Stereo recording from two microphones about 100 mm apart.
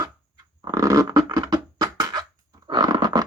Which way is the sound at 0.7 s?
35° right (ahead or behind).